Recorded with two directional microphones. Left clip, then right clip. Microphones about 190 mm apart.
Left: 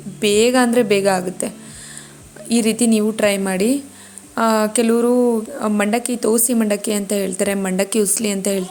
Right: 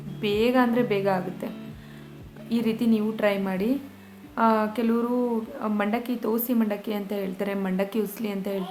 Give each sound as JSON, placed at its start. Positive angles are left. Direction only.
{"t": 0.2, "sound": "a woman's voice", "side_deg": 35}